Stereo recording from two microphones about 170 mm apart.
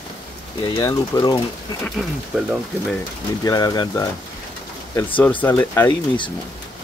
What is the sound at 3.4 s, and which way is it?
Speech, 20° left (ahead or behind).